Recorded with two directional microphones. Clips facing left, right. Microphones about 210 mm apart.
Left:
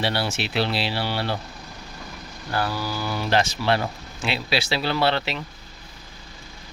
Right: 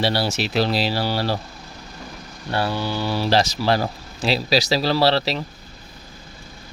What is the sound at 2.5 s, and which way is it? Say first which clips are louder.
Speech: right 3 dB; 25° right (ahead or behind).